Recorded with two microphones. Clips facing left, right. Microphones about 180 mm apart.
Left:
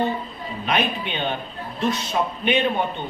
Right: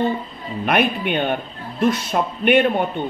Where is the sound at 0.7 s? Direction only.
55° right (ahead or behind).